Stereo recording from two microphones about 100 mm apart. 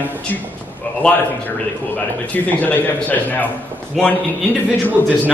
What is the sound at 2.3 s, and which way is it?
A man's voice, 15° left (ahead or behind).